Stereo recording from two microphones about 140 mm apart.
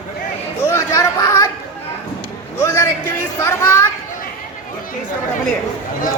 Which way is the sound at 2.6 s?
20° left (ahead or behind).